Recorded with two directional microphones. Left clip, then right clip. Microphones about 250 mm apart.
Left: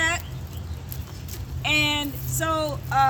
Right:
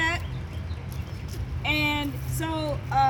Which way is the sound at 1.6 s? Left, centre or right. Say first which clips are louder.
Left 3 dB; centre.